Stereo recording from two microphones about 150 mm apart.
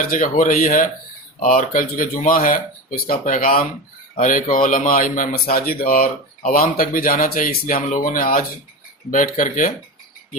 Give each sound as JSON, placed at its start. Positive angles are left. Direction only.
{"t": 0.1, "sound": "a man's voice", "side_deg": 65}